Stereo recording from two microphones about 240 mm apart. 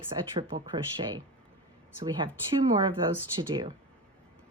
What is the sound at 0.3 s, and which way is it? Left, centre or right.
Speech, centre.